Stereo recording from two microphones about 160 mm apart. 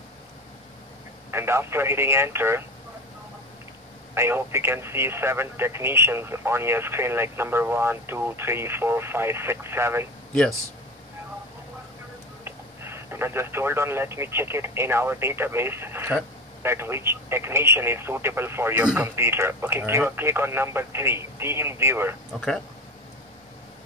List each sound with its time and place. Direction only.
1.3 s speech: 15° right (ahead or behind)
4.1 s speech: 15° right (ahead or behind)
12.4 s speech: 15° right (ahead or behind)